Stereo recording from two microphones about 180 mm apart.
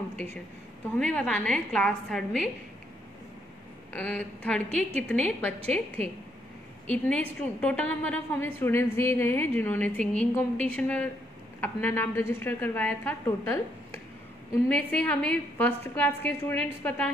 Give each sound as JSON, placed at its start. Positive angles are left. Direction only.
{"t": 0.9, "sound": "a woman's voice", "side_deg": 5}
{"t": 3.9, "sound": "a woman's voice", "side_deg": 10}
{"t": 4.6, "sound": "a woman's voice", "side_deg": -40}
{"t": 6.9, "sound": "a woman's voice", "side_deg": 10}